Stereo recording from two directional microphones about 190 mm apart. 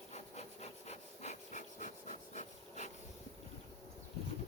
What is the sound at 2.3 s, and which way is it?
Rub, 40° left (ahead or behind).